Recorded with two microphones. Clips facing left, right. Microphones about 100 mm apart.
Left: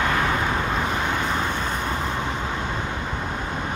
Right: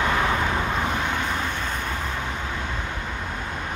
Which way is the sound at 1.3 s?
15° left (ahead or behind).